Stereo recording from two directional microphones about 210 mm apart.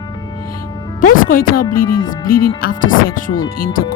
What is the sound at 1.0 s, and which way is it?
Speech, 40° left (ahead or behind).